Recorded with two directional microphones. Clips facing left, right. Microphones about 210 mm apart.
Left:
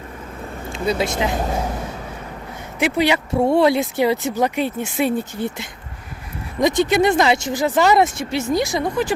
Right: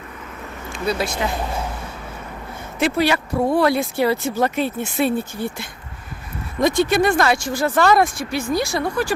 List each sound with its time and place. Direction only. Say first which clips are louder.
0.7 s speech: left 2 dB; 20° left (ahead or behind)
2.7 s speech: even; 15° left (ahead or behind)